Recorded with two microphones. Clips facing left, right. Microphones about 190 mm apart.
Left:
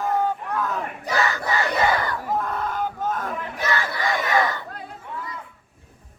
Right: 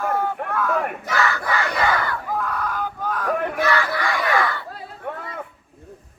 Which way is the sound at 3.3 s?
60° right (ahead or behind).